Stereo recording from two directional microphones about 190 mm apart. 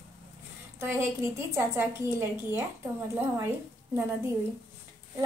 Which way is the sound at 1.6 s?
15° right (ahead or behind).